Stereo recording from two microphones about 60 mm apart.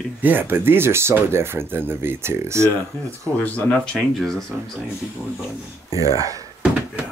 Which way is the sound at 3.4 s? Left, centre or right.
Left.